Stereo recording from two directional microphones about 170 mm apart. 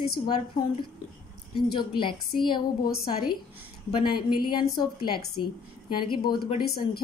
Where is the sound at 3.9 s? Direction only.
30° left (ahead or behind).